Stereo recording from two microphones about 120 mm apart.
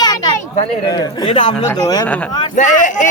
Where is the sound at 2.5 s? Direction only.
90° left.